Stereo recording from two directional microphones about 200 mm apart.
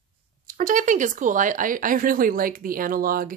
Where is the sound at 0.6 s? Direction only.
40° right (ahead or behind).